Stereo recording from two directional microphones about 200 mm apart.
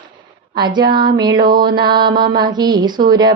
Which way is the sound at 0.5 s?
20° right (ahead or behind).